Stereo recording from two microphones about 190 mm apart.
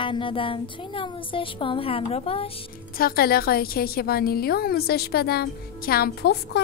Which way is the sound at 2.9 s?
50° left (ahead or behind).